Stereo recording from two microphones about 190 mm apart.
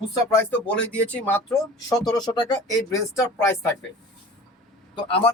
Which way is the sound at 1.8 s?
20° left (ahead or behind).